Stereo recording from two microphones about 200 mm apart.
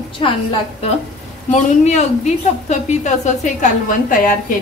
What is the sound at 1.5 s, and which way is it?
A woman's voice, 35° left (ahead or behind).